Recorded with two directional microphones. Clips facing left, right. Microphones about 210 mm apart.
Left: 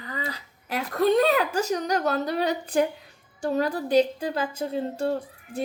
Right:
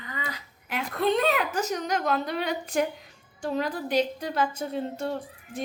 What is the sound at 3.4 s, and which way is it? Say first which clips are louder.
A woman's voice: left 3 dB; 40° left (ahead or behind).